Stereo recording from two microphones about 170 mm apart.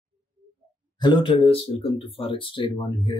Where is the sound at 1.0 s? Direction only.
30° left (ahead or behind).